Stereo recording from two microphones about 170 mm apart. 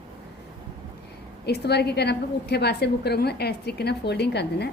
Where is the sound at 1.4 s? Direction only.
75° left (ahead or behind).